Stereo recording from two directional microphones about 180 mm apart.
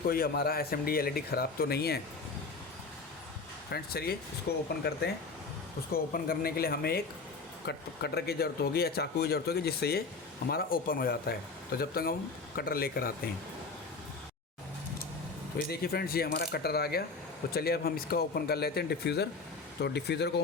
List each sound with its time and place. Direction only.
0.0 s speech: 55° left (ahead or behind)
3.7 s speech: 60° left (ahead or behind)
5.9 s speech: 55° left (ahead or behind)
15.7 s speech: 60° left (ahead or behind)